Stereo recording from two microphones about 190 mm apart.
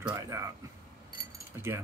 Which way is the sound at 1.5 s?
15° right (ahead or behind).